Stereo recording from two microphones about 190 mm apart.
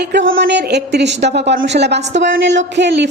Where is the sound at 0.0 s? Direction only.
65° right (ahead or behind).